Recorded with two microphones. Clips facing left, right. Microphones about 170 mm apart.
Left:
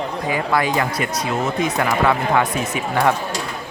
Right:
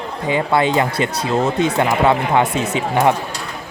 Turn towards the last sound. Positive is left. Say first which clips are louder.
# right 3 dB
turn(degrees=-25)  # may be behind; listen again after turning